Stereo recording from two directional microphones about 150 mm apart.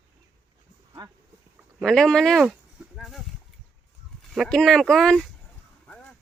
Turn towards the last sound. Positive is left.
turn(degrees=0)  # may be behind; listen again after turning